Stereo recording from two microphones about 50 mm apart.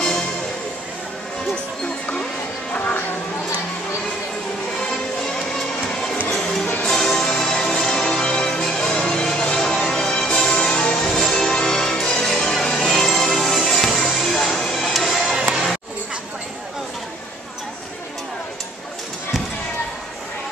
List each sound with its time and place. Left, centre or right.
2.7 s music: left
4.8 s music: centre
11.1 s music: centre
15.3 s music: centre